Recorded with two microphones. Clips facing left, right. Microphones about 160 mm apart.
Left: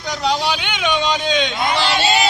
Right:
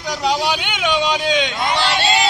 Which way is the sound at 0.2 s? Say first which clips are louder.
Even; 10° right (ahead or behind).